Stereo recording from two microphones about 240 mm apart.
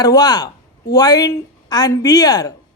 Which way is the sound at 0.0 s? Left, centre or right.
Centre.